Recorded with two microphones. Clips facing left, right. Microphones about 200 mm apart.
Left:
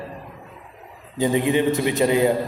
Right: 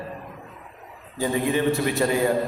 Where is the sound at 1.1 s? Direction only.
20° left (ahead or behind).